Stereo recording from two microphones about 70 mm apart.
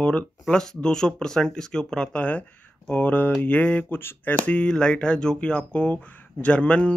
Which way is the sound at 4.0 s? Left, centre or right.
Left.